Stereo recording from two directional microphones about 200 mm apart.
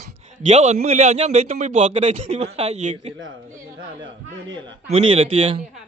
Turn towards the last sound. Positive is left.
turn(degrees=-25)  # may be behind; listen again after turning